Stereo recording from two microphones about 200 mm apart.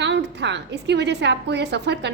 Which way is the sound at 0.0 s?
60° right (ahead or behind).